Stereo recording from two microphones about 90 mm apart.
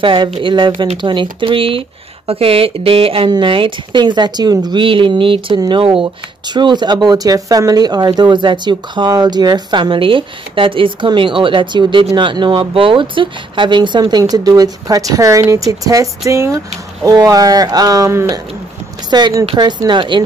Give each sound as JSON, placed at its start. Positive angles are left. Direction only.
{"t": 0.0, "sound": "speech", "side_deg": -70}
{"t": 3.4, "sound": "speech", "side_deg": -70}
{"t": 6.5, "sound": "speech", "side_deg": -55}